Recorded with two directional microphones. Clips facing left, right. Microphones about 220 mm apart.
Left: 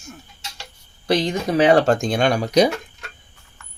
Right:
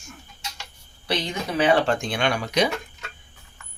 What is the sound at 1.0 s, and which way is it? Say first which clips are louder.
Speech: left 7 dB; 45° left (ahead or behind).